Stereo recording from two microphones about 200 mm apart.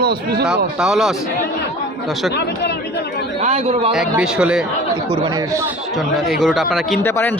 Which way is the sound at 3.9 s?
5° right (ahead or behind).